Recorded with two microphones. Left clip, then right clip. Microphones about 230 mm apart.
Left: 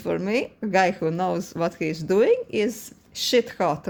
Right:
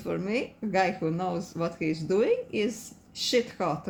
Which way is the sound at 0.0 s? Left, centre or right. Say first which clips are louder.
Left 6 dB; left.